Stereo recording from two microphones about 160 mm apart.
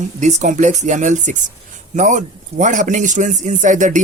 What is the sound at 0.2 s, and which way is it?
Speech, 45° right (ahead or behind).